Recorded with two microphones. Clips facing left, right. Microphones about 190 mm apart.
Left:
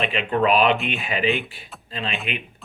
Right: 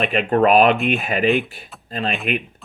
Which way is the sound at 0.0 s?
45° right (ahead or behind).